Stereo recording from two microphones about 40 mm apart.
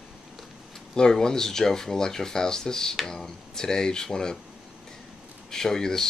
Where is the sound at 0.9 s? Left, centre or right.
Centre.